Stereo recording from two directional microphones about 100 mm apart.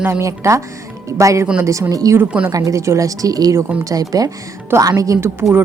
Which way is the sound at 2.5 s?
35° right (ahead or behind).